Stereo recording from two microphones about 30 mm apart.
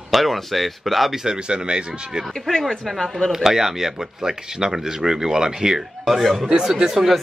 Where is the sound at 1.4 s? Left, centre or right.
Right.